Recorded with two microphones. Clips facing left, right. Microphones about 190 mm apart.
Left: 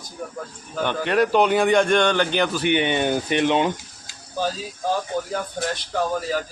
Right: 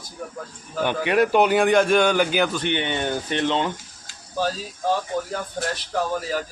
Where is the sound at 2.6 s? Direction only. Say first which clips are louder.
Left 4 dB; 15° left (ahead or behind).